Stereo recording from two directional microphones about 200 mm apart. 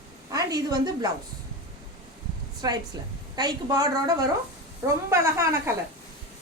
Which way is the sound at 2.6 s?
20° right (ahead or behind).